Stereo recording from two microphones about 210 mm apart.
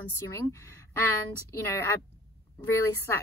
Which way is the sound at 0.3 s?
15° left (ahead or behind).